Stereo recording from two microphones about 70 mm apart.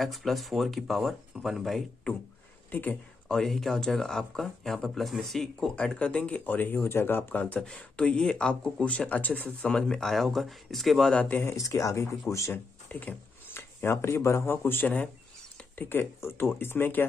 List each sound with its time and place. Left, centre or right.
0.0 s speech: centre
2.7 s speech: left
3.3 s speech: centre
9.7 s speech: centre
11.1 s speech: left
11.4 s speech: left
12.8 s speech: left